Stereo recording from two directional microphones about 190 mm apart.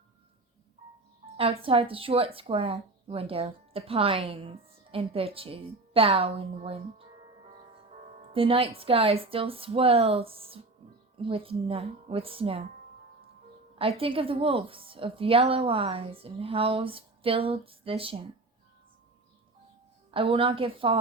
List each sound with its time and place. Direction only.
1.4 s speech: 30° right (ahead or behind)
8.3 s speech: 30° right (ahead or behind)
13.7 s speech: 30° right (ahead or behind)
20.1 s speech: 30° right (ahead or behind)